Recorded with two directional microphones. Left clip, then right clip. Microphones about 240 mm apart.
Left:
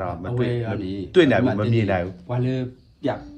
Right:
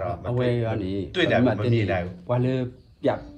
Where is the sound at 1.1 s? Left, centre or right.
Centre.